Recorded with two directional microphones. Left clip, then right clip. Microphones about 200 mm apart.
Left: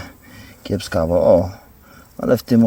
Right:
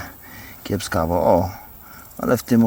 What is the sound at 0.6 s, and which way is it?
Speech, 45° left (ahead or behind).